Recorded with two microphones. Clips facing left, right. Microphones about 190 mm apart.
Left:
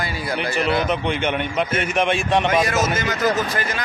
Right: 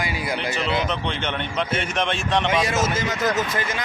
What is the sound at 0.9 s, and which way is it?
A man's voice, 10° left (ahead or behind).